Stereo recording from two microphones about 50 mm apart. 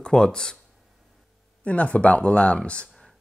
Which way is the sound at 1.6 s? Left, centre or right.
Left.